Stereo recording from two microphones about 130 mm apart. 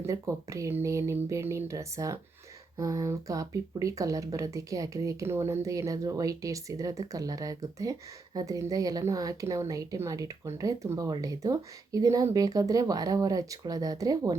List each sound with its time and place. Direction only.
0.0 s speech: 25° right (ahead or behind)